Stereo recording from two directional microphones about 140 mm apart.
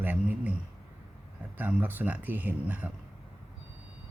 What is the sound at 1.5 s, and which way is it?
Speech, 15° right (ahead or behind).